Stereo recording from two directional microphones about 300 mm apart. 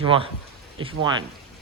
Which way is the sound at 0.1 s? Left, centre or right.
Centre.